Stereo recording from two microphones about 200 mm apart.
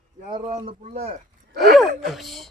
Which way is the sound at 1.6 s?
Centre (ahead or behind).